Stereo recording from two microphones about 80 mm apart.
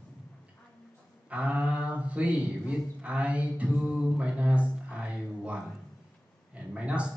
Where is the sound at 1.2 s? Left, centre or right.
Centre.